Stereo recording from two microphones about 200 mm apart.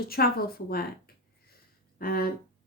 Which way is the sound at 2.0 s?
45° left (ahead or behind).